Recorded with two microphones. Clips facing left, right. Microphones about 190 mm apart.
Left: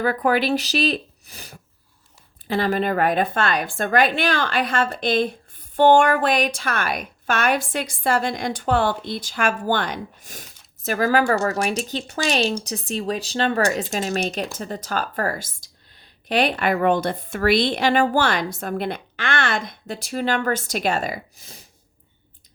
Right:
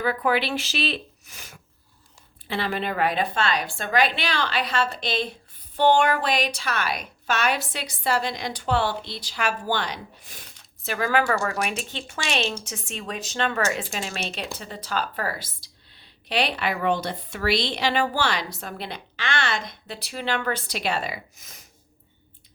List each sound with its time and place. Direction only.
0.0 s a woman's voice: 45° left (ahead or behind)
21.3 s speech: 30° left (ahead or behind)